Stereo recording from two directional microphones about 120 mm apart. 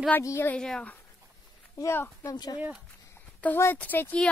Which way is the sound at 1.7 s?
20° left (ahead or behind).